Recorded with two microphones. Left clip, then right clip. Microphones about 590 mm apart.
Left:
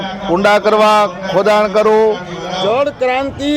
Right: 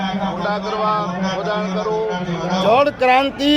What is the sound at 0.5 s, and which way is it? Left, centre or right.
Speech, left.